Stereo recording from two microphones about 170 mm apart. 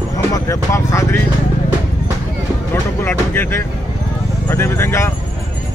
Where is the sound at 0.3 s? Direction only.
20° left (ahead or behind).